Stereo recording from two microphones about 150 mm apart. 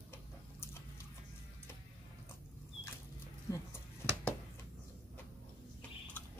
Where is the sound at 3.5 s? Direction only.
20° left (ahead or behind).